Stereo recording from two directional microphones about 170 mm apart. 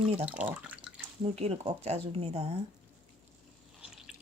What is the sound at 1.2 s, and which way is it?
Speech, 35° right (ahead or behind).